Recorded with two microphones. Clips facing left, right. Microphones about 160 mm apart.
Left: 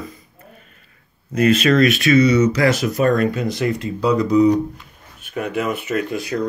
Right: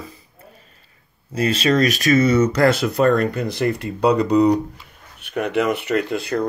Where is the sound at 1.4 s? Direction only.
30° right (ahead or behind).